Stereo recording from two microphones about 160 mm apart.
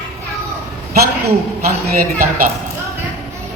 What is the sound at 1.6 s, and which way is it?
Speech, 65° right (ahead or behind).